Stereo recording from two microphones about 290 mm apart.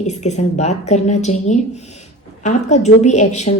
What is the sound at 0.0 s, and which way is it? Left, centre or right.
A woman's voice, left.